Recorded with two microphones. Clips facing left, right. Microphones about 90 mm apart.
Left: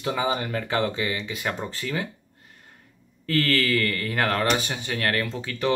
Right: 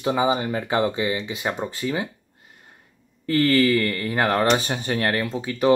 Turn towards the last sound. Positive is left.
turn(degrees=-20)  # may be behind; listen again after turning